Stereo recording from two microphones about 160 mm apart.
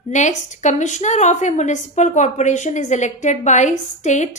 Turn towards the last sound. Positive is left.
turn(degrees=50)  # may be behind; listen again after turning